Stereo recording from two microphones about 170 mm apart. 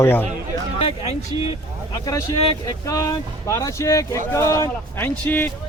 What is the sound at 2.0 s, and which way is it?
Speech, 20° left (ahead or behind).